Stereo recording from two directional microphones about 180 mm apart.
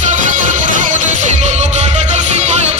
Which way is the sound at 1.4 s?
40° right (ahead or behind).